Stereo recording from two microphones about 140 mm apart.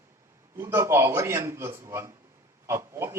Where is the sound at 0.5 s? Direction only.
20° right (ahead or behind).